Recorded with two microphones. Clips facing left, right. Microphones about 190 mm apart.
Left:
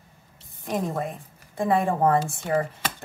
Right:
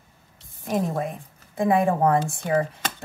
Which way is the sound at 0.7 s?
Centre (ahead or behind).